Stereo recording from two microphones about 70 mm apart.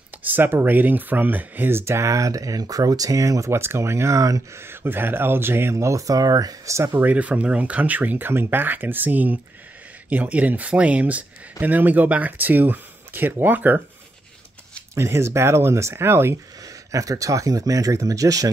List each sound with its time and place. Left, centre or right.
0.2 s speech: right
4.6 s speech: right
6.9 s speech: right
15.0 s speech: right
16.6 s speech: right